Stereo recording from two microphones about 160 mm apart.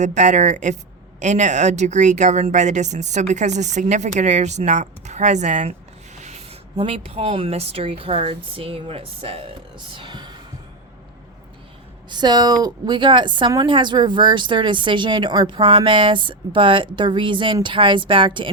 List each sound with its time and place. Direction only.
0.0 s speech: 50° right (ahead or behind); by 10.3 s 30° right (ahead or behind)
12.0 s a woman's voice: 25° right (ahead or behind)